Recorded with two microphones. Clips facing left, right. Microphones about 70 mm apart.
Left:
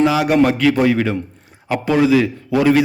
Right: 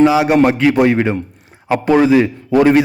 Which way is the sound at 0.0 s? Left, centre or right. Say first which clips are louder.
Right 3 dB; right.